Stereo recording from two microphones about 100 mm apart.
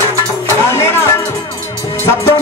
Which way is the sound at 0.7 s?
25° left (ahead or behind).